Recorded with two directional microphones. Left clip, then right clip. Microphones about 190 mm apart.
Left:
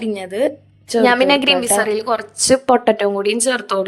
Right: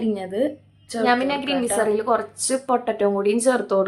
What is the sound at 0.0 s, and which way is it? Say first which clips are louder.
A woman's voice: left 4 dB; 45° left (ahead or behind).